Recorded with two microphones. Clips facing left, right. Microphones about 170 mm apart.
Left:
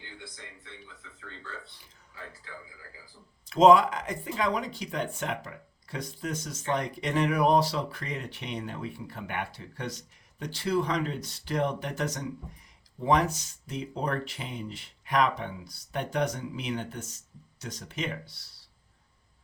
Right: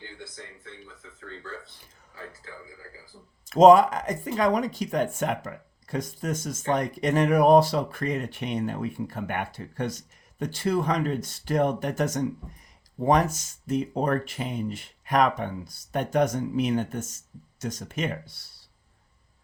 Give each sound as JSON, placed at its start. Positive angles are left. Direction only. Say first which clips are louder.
{"t": 1.5, "sound": "speech", "louder": "right 4 dB", "side_deg": -45}